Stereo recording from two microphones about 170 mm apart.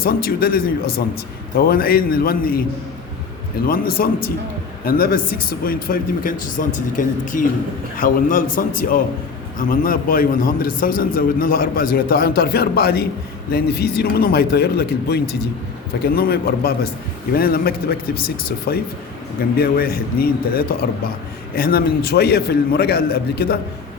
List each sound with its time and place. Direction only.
0.0 s a man's voice: 65° left (ahead or behind)
3.7 s a man's voice: 60° left (ahead or behind)